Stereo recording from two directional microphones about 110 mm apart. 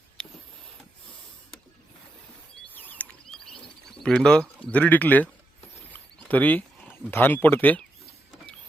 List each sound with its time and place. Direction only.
0.2 s printer: 5° left (ahead or behind)
3.2 s bird: 5° left (ahead or behind)
4.7 s speech: 15° left (ahead or behind)